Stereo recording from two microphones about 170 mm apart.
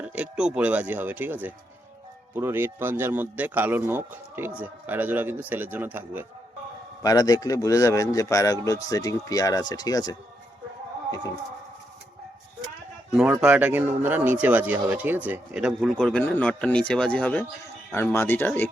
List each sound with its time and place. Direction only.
0.0 s speech: 5° right (ahead or behind)
7.0 s a man's voice: 20° left (ahead or behind)
13.4 s speech: 10° right (ahead or behind); by 18.7 s 10° left (ahead or behind)